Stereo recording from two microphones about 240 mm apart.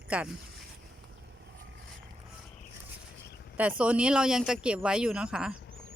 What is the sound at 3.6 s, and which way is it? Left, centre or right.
Speech, centre.